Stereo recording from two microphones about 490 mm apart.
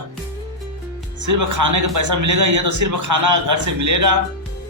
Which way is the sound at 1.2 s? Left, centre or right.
Right.